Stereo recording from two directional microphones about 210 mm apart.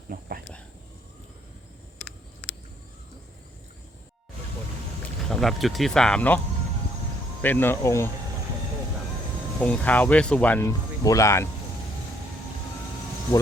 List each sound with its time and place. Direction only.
0.1 s a sound: 45° right (ahead or behind)
5.3 s speech: centre (ahead or behind)
7.4 s speech: 10° left (ahead or behind)
9.6 s speech: 5° left (ahead or behind)